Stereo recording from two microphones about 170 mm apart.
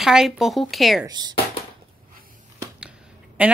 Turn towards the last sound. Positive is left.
turn(degrees=-10)  # may be behind; listen again after turning